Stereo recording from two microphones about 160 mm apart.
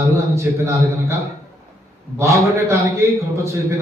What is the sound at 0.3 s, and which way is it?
Speech, 20° right (ahead or behind).